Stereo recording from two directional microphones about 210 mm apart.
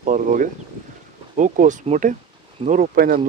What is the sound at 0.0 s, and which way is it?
Speech, 35° right (ahead or behind).